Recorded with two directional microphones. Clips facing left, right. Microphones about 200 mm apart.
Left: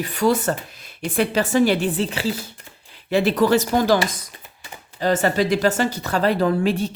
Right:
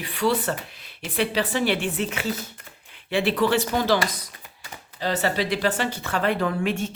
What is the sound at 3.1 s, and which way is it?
Speech, 40° left (ahead or behind).